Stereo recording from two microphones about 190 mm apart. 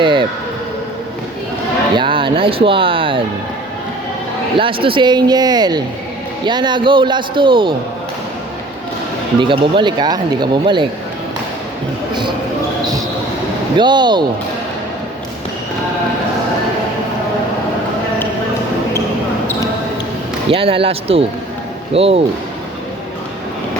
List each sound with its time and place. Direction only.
0.0 s a sound: 25° right (ahead or behind)
2.0 s speech: 25° right (ahead or behind)
4.5 s speech: 25° right (ahead or behind)
9.4 s speech: 25° right (ahead or behind)
13.7 s speech: 25° right (ahead or behind)
20.5 s speech: 30° right (ahead or behind)